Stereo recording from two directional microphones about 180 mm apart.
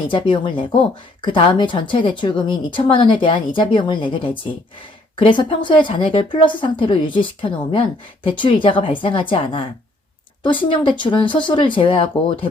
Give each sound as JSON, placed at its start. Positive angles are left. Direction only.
{"t": 0.1, "sound": "speech", "side_deg": 25}